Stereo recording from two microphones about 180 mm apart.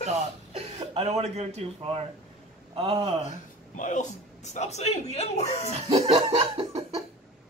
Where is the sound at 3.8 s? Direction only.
45° left (ahead or behind).